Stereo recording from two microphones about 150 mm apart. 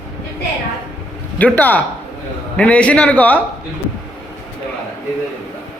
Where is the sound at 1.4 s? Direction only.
10° left (ahead or behind).